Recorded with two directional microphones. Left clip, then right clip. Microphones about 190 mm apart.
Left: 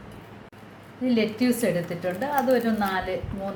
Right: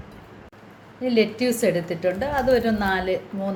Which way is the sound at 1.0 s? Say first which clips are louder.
Right 4 dB; 40° right (ahead or behind).